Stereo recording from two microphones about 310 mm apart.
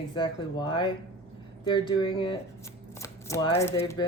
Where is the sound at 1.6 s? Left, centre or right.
Centre.